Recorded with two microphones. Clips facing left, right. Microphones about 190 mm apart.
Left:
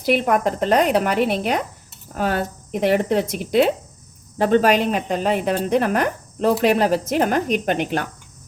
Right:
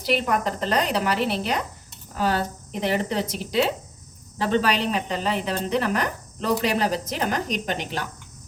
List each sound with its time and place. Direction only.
0.0 s speech: 55° left (ahead or behind)